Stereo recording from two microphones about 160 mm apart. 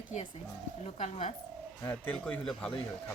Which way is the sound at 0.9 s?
35° left (ahead or behind).